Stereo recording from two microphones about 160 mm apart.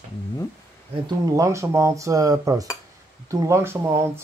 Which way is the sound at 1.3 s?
20° right (ahead or behind).